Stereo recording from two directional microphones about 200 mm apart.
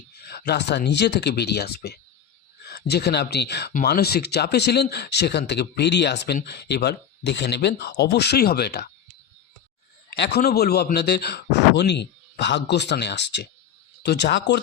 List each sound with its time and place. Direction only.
0.3 s speech: 55° left (ahead or behind)
10.2 s speech: 55° left (ahead or behind)